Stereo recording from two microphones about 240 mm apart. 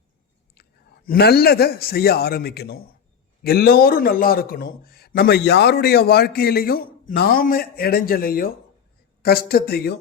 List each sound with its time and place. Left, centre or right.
1.0 s a man's voice: left